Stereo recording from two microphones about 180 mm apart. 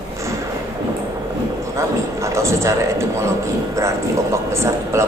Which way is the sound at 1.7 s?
15° right (ahead or behind).